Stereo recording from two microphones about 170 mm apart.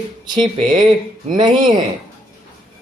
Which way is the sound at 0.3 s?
25° right (ahead or behind).